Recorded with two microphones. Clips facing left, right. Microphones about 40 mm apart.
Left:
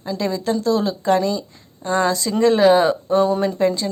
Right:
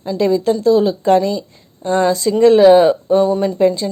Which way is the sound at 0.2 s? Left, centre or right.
Right.